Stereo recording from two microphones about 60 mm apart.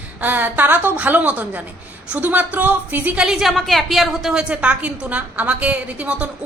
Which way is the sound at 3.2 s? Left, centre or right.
Centre.